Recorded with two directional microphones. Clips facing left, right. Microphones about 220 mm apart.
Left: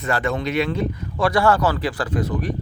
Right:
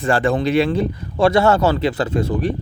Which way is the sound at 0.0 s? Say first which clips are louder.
Right 5 dB; 30° right (ahead or behind).